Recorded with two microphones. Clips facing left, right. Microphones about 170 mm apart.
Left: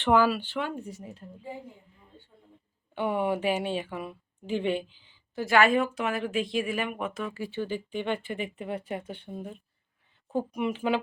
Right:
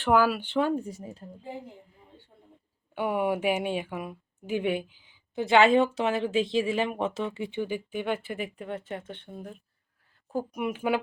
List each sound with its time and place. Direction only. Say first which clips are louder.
0.0 s speech: even; 5° right (ahead or behind)
1.2 s a woman's voice: right 2 dB; 40° right (ahead or behind)
2.9 s speech: even; 10° right (ahead or behind)